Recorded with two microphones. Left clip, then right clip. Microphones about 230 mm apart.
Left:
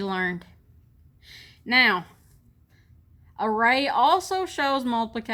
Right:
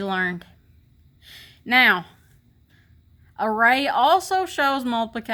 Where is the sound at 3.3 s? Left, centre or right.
Right.